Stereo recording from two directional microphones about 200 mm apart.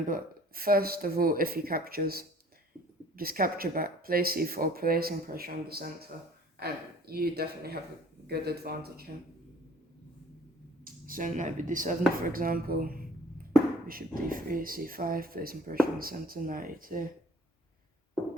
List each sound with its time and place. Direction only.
0.1 s speech: 45° right (ahead or behind)
10.8 s speech: 45° right (ahead or behind)